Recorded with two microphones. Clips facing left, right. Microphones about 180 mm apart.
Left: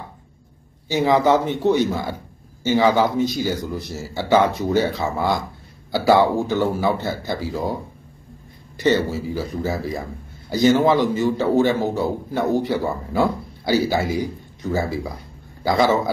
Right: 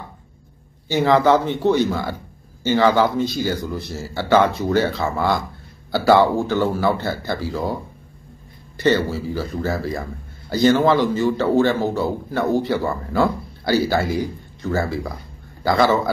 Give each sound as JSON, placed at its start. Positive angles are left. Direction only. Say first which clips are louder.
{"t": 0.9, "sound": "a man's voice", "louder": "right 1 dB", "side_deg": 15}
{"t": 8.7, "sound": "a man's voice", "louder": "even", "side_deg": 15}